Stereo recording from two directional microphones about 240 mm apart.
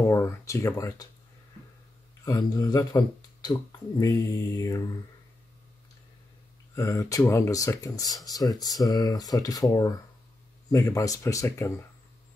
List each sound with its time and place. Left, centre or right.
0.1 s speech: centre
2.2 s speech: centre
6.7 s speech: centre